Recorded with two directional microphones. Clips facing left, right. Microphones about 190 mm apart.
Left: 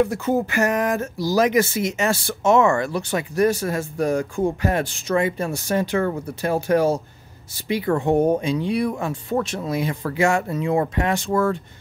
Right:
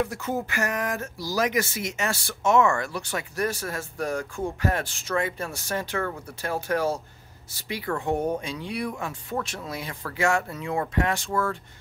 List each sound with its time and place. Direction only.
0.0 s speech: 25° left (ahead or behind)